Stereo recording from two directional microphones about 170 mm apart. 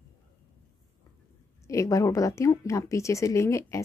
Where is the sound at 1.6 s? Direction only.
20° left (ahead or behind).